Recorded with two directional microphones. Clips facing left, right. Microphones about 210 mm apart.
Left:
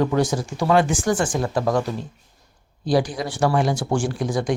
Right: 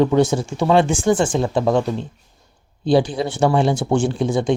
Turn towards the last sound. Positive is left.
turn(degrees=-25)  # may be behind; listen again after turning